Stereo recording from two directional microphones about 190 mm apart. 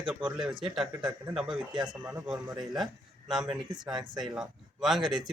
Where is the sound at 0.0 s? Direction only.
5° right (ahead or behind).